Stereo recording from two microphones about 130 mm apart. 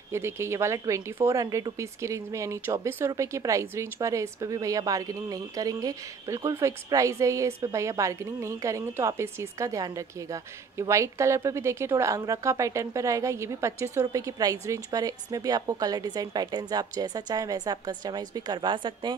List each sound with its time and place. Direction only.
0.1 s a woman's voice: 20° right (ahead or behind); by 19.1 s 40° right (ahead or behind)